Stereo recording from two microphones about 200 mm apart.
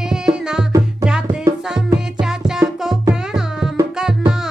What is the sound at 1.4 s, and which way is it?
Music, 20° right (ahead or behind).